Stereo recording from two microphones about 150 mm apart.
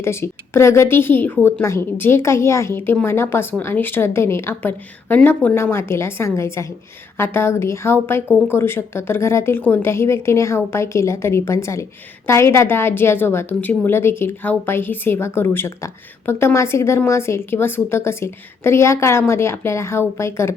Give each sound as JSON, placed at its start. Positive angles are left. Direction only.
{"t": 0.0, "sound": "a woman's voice", "side_deg": 15}